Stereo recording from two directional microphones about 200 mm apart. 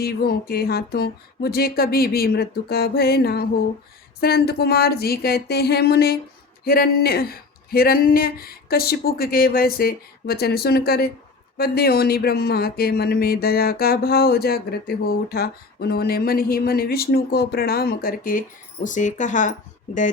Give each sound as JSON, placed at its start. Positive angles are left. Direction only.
{"t": 0.0, "sound": "speech", "side_deg": 50}